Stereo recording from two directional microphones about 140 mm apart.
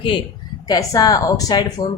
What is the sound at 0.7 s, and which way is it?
A woman's voice, 25° left (ahead or behind).